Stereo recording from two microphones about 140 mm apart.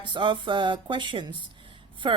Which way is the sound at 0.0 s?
35° right (ahead or behind).